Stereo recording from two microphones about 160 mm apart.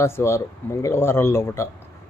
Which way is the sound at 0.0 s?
15° left (ahead or behind).